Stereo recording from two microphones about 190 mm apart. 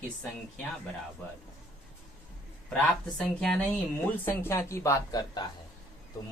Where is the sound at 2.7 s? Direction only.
5° left (ahead or behind).